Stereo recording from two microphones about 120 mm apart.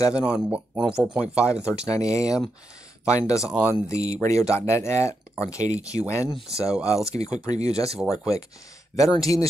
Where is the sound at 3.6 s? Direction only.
25° left (ahead or behind).